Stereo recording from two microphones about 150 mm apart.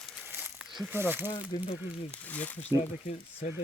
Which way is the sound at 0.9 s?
15° right (ahead or behind).